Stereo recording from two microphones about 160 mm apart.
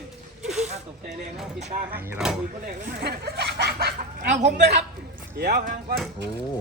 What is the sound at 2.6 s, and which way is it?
Speech, 75° right (ahead or behind).